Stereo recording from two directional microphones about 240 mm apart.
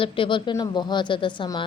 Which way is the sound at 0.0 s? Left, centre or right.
Left.